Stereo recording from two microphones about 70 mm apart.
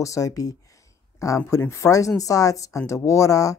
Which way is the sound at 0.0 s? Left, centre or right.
Left.